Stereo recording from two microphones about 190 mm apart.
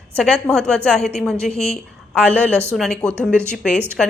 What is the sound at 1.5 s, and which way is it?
Speech, 30° left (ahead or behind).